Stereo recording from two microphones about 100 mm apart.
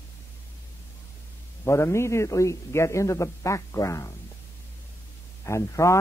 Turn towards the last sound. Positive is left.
turn(degrees=30)  # may be behind; listen again after turning